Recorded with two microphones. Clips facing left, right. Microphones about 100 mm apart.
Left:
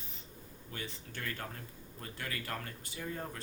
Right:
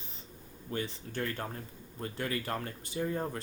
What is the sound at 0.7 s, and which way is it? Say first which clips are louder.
Speech: right 8 dB; 35° right (ahead or behind).